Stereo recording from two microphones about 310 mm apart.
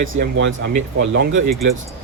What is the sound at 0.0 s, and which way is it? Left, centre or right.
Speech, right.